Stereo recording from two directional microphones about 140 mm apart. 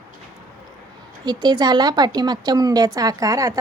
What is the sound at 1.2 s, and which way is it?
A woman's voice, 30° right (ahead or behind).